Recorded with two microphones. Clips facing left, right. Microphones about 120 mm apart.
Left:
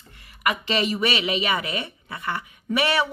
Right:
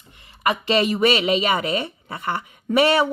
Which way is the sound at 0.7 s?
50° right (ahead or behind).